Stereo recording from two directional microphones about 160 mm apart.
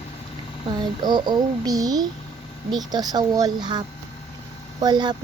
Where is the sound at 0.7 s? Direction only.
25° right (ahead or behind).